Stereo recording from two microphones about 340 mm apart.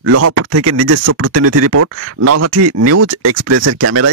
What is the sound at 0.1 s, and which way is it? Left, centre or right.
Speech, right.